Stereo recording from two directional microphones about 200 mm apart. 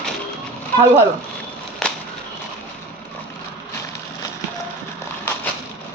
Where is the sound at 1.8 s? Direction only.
Centre (ahead or behind).